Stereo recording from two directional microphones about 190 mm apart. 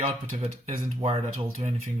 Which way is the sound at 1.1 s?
30° right (ahead or behind).